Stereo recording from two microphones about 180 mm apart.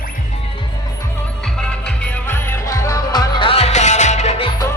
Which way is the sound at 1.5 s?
5° left (ahead or behind).